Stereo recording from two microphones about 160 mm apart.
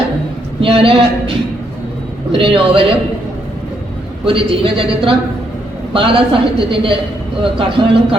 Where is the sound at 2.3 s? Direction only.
35° right (ahead or behind).